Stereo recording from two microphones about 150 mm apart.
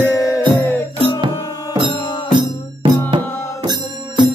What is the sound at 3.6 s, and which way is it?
Music, 30° right (ahead or behind).